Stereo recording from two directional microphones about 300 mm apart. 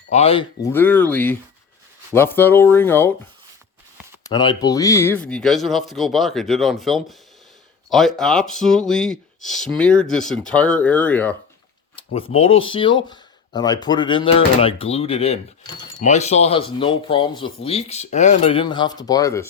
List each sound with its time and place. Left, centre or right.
0.1 s speech: centre
4.2 s speech: centre
12.1 s speech: centre